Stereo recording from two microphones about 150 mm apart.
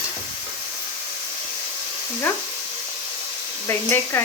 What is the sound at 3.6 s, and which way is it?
Speech, 15° left (ahead or behind).